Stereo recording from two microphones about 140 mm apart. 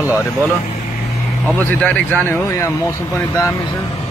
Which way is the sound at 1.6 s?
10° left (ahead or behind).